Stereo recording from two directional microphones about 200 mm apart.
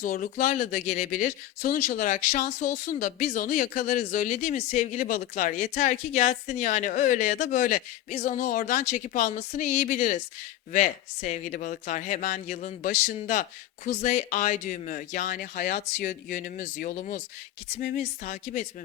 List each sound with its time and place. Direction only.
0.0 s speech: 40° left (ahead or behind)